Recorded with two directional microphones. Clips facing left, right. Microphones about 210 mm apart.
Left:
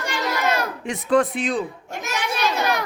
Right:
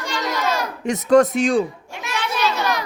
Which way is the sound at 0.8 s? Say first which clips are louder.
Right 6 dB; 45° right (ahead or behind).